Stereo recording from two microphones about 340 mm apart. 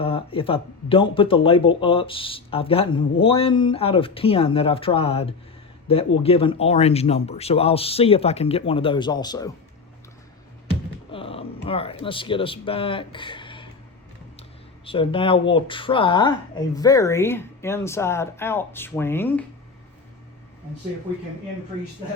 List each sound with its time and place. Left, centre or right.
0.0 s speech: centre
11.1 s speech: centre
14.8 s speech: centre